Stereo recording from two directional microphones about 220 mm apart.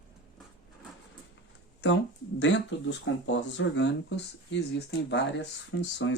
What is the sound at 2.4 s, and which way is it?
Speech, 55° left (ahead or behind).